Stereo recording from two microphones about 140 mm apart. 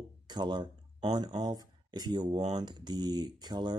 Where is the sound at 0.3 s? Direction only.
30° right (ahead or behind).